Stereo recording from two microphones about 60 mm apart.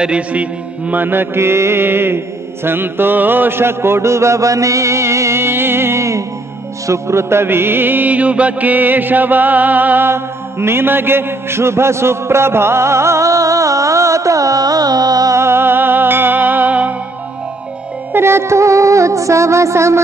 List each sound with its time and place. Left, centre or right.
0.0 s mantra: right
1.0 s mantra: right
6.9 s music: right
15.3 s music: right
18.1 s music: right